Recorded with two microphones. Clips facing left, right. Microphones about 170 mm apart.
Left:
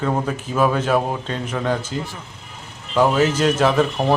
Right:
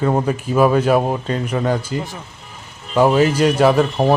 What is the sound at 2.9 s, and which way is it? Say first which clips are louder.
Speech: right 3 dB; 10° right (ahead or behind).